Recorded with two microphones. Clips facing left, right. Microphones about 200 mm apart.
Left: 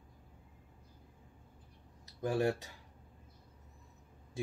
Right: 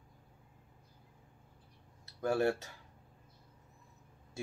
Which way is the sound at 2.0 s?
15° left (ahead or behind).